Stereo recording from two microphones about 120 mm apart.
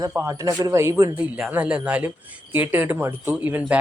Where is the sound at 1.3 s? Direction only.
10° right (ahead or behind).